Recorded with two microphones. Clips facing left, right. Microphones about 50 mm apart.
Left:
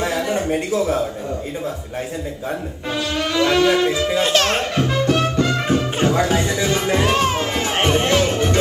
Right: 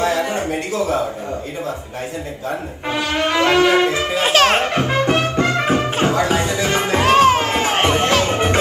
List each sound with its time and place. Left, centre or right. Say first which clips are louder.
0.0 s a sound: right 2 dB; right
0.7 s a man's voice: right 2 dB; right
2.9 s music: right 3 dB; right
4.1 s a child's voice: right 3 dB; centre
4.6 s music: right 2 dB; right